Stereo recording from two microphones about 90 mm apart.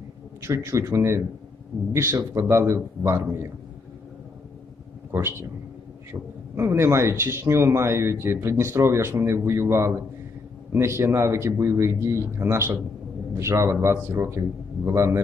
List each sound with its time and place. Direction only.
0.4 s speech: 30° right (ahead or behind)
5.1 s speech: 25° right (ahead or behind)
6.5 s speech: 30° right (ahead or behind)